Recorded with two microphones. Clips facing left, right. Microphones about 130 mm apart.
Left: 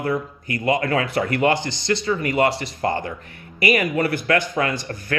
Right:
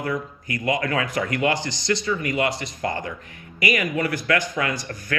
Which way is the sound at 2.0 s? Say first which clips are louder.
Left 6 dB; 35° left (ahead or behind).